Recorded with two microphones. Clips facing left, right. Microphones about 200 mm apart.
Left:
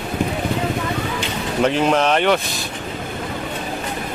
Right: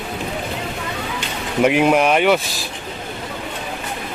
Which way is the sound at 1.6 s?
10° right (ahead or behind).